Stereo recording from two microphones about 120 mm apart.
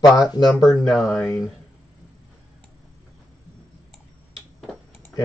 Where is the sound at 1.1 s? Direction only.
15° left (ahead or behind).